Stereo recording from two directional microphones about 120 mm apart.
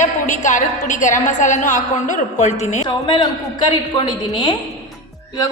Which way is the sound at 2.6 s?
75° left (ahead or behind).